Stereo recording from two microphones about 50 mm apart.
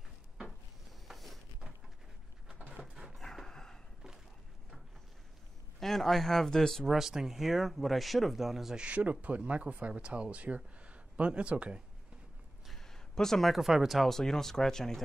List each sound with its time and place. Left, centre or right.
1.0 s a sound: centre
2.8 s dog: centre
3.2 s dog: centre
5.8 s speech: centre
6.9 s speech: centre
8.7 s speech: right
12.6 s speech: centre